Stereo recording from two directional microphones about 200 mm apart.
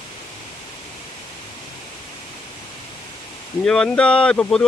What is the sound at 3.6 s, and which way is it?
Speech, 5° left (ahead or behind).